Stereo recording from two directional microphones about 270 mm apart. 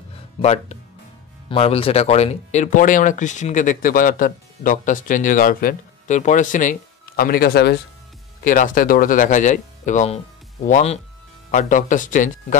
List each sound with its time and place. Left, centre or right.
0.4 s speech: left